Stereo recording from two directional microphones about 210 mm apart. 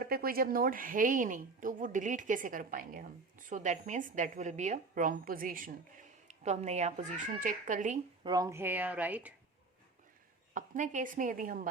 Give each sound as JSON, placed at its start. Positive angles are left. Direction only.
{"t": 0.0, "sound": "a woman's voice", "side_deg": -45}
{"t": 8.2, "sound": "speech", "side_deg": -20}
{"t": 10.5, "sound": "a woman's voice", "side_deg": -40}